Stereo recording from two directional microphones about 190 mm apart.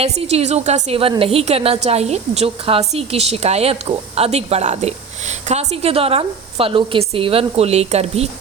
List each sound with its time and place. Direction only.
0.0 s a woman's voice: 30° right (ahead or behind)